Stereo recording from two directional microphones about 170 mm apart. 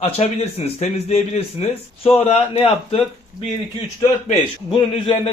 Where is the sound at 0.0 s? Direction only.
40° left (ahead or behind).